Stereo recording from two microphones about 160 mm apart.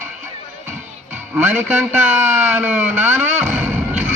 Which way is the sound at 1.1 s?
10° right (ahead or behind).